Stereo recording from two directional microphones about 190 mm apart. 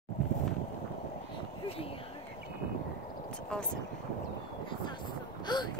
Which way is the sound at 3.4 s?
5° left (ahead or behind).